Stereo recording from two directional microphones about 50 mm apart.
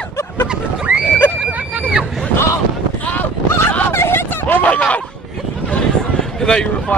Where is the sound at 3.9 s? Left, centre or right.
Left.